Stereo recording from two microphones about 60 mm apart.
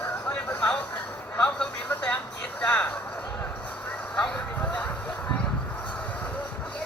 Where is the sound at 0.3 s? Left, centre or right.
Left.